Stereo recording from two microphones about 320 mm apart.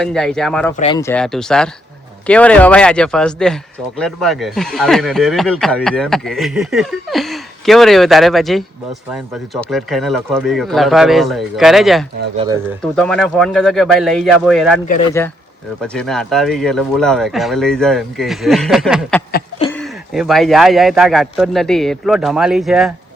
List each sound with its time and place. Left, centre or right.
0.0 s speech: centre
0.8 s speech: centre
19.3 s a sound: centre
19.7 s speech: centre